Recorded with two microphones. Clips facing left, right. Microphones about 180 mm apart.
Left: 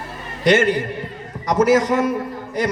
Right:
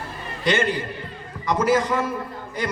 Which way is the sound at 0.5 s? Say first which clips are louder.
Left 6 dB; 45° left (ahead or behind).